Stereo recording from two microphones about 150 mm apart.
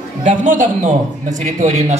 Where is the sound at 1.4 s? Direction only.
50° right (ahead or behind).